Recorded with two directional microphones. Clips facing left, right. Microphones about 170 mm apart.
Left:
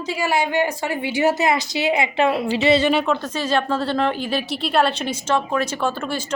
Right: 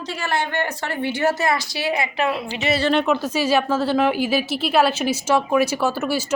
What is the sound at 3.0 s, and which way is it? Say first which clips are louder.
Speech: right 2 dB; 5° right (ahead or behind).